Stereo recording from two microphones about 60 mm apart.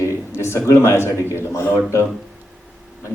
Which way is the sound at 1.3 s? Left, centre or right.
Left.